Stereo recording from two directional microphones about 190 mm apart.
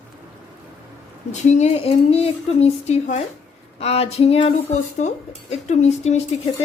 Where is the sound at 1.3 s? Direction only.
35° left (ahead or behind).